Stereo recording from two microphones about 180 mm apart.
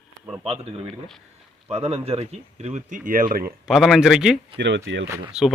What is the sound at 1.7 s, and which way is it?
Speech, 35° right (ahead or behind).